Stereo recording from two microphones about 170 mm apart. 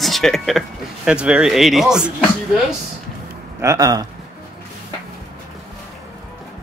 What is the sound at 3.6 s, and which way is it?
Speech, 20° right (ahead or behind).